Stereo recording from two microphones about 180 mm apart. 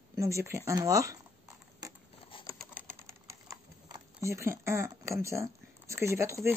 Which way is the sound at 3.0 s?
15° right (ahead or behind).